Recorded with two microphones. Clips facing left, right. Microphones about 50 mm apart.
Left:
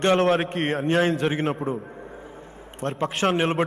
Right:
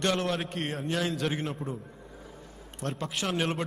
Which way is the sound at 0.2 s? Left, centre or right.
Left.